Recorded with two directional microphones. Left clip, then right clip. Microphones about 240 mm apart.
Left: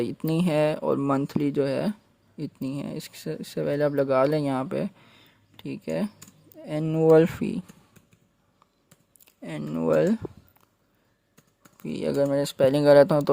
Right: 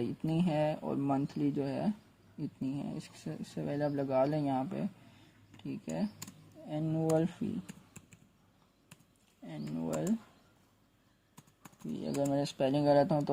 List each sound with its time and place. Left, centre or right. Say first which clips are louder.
0.0 s speech: left 8 dB; left
9.4 s speech: left 11 dB; left
12.0 s speech: left 10 dB; left